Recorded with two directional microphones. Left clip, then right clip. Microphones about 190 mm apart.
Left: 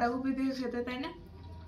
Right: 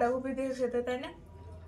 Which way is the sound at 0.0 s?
15° right (ahead or behind).